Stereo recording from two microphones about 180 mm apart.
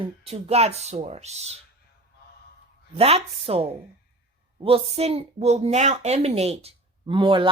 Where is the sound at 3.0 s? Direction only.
35° right (ahead or behind).